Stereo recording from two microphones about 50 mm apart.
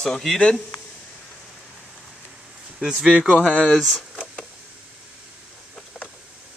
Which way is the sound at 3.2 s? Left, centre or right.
Centre.